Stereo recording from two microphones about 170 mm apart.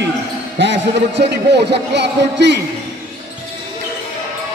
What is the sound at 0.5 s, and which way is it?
A man's voice, 90° right.